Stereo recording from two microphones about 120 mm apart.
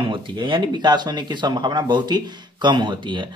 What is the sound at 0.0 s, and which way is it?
Speech, 45° right (ahead or behind).